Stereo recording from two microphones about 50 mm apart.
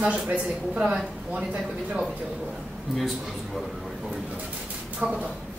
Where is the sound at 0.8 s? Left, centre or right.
Centre.